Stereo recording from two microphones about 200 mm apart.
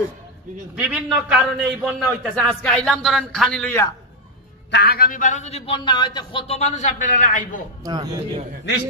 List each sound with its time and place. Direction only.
0.7 s a man's voice: 5° right (ahead or behind)
4.6 s a man's voice: 55° left (ahead or behind); by 7.6 s 40° left (ahead or behind)
7.8 s speech: 20° right (ahead or behind)